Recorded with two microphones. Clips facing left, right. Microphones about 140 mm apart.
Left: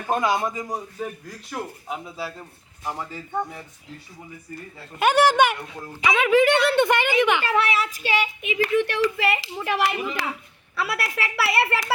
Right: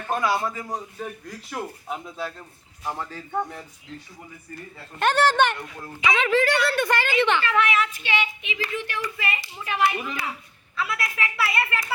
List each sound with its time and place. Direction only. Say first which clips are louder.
0.0 s a woman's voice: left 2 dB; 20° left (ahead or behind)
0.9 s a man's voice: left 2 dB; 5° left (ahead or behind)
4.9 s a woman's voice: left 2 dB; 10° left (ahead or behind)
7.4 s speech: even; 35° left (ahead or behind); by 10.2 s 85° left
10.8 s a woman's voice: left 2 dB; 70° left (ahead or behind)